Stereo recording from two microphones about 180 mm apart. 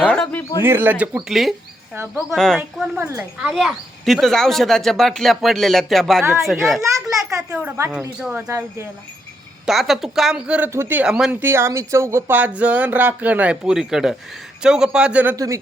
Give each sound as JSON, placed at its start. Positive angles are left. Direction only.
{"t": 0.0, "sound": "a sound", "side_deg": 5}
{"t": 0.6, "sound": "speech", "side_deg": -10}
{"t": 6.9, "sound": "a sound", "side_deg": -15}
{"t": 7.5, "sound": "speech", "side_deg": -10}
{"t": 8.4, "sound": "speech", "side_deg": -15}
{"t": 9.6, "sound": "speech", "side_deg": 0}